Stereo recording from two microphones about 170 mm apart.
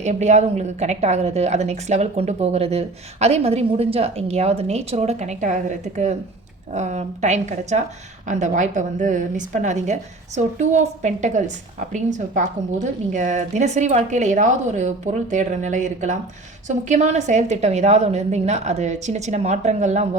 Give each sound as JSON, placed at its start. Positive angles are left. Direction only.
{"t": 0.0, "sound": "a woman's voice", "side_deg": -45}